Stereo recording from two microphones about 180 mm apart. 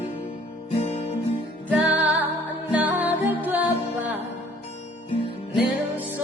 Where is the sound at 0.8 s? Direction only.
35° left (ahead or behind).